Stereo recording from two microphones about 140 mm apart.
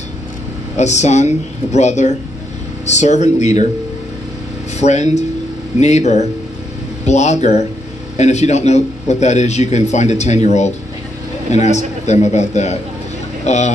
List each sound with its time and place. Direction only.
0.7 s speech: 55° left (ahead or behind)
4.7 s a man's voice: 55° left (ahead or behind)